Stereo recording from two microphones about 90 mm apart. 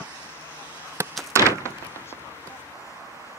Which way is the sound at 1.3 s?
30° right (ahead or behind).